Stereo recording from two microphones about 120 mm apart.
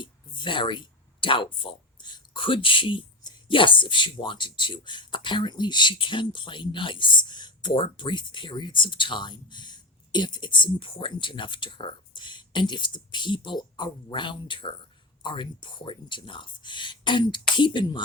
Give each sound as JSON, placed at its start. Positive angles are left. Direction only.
{"t": 0.0, "sound": "speech", "side_deg": 40}